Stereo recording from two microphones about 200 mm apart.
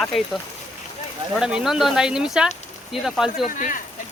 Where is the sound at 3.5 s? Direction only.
40° left (ahead or behind).